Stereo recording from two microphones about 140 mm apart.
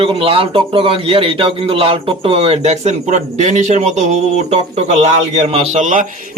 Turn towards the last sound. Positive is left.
turn(degrees=-60)  # may be behind; listen again after turning